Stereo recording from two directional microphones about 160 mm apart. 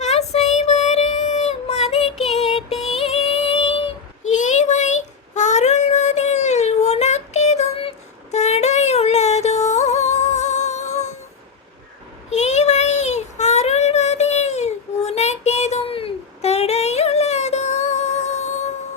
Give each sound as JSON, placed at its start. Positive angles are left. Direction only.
{"t": 0.0, "sound": "child singing", "side_deg": 40}
{"t": 2.3, "sound": "music", "side_deg": 40}
{"t": 4.3, "sound": "child singing", "side_deg": 50}
{"t": 12.3, "sound": "child singing", "side_deg": 45}